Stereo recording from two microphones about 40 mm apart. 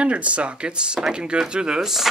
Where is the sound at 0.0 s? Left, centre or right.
Right.